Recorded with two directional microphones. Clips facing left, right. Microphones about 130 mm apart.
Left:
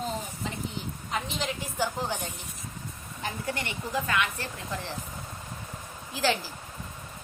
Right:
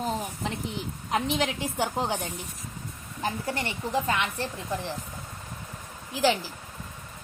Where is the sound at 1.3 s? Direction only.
70° right (ahead or behind).